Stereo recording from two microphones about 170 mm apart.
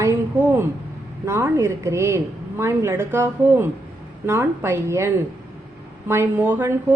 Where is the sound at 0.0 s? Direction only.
15° right (ahead or behind).